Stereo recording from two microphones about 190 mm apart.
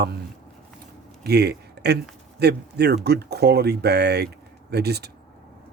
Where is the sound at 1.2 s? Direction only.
60° right (ahead or behind).